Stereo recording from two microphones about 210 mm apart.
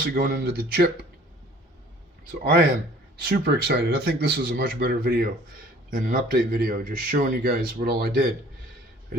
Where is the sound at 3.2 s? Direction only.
50° right (ahead or behind).